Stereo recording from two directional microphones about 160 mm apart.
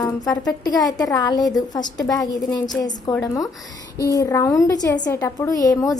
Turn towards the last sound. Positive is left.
turn(degrees=20)  # may be behind; listen again after turning